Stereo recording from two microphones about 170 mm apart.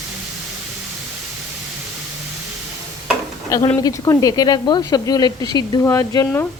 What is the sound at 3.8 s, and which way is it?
Speech, 20° left (ahead or behind).